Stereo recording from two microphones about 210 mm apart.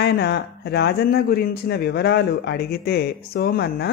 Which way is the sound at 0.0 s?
50° left (ahead or behind).